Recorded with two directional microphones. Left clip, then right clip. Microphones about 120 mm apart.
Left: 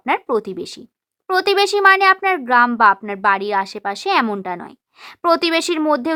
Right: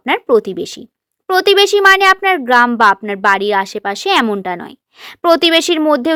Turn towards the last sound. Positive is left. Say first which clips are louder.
# right 5 dB
turn(degrees=-35)  # may be behind; listen again after turning